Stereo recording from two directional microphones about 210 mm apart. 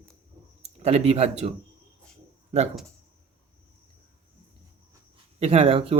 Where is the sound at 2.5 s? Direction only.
30° right (ahead or behind).